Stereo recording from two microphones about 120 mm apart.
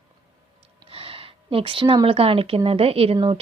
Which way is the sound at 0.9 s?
50° right (ahead or behind).